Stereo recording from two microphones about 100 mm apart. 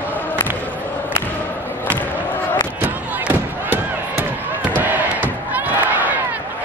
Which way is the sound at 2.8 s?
20° right (ahead or behind).